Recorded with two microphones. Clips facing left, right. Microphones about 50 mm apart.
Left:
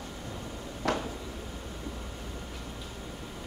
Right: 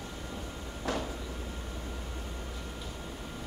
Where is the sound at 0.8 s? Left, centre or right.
Left.